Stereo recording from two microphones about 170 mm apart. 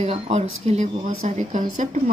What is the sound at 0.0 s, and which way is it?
Speech, 40° right (ahead or behind).